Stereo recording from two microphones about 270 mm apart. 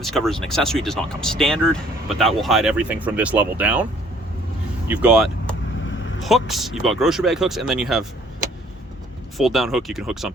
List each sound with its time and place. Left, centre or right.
0.0 s speech: centre
4.9 s speech: centre
6.0 s vehicle: left
6.2 s speech: centre
9.4 s speech: centre